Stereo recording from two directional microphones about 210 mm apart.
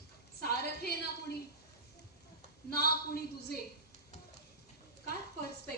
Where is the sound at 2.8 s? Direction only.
50° left (ahead or behind).